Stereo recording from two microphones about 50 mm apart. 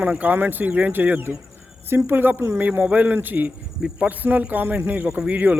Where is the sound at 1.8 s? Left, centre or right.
Right.